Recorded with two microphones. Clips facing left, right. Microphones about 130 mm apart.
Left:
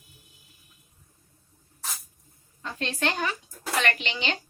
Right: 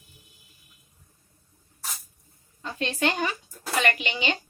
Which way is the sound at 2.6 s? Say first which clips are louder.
Right 2 dB; 5° right (ahead or behind).